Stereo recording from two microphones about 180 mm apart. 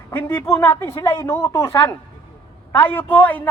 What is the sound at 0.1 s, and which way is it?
A woman's voice, 10° left (ahead or behind).